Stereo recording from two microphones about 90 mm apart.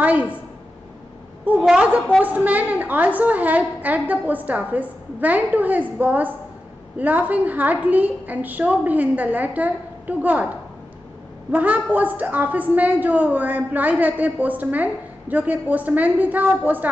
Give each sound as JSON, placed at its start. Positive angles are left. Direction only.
{"t": 0.0, "sound": "a sound", "side_deg": -15}
{"t": 1.4, "sound": "a woman's voice", "side_deg": -15}
{"t": 11.5, "sound": "a woman's voice", "side_deg": -20}